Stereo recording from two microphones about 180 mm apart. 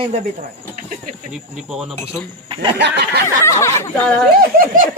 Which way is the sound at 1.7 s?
Centre (ahead or behind).